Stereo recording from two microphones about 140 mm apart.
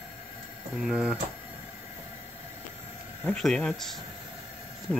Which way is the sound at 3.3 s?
5° left (ahead or behind).